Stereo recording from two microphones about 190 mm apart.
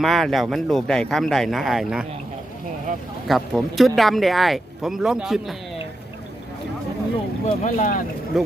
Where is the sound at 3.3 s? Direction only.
Centre (ahead or behind).